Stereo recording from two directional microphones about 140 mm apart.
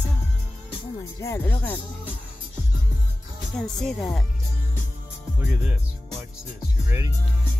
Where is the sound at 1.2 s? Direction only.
15° left (ahead or behind).